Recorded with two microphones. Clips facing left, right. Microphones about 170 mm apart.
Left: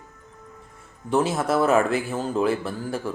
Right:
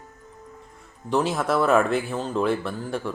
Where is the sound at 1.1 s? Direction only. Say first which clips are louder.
Left 1 dB; centre (ahead or behind).